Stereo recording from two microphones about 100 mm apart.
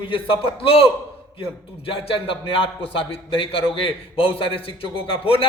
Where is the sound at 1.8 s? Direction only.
65° left (ahead or behind).